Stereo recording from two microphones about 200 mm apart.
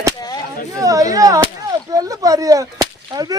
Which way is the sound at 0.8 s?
15° right (ahead or behind).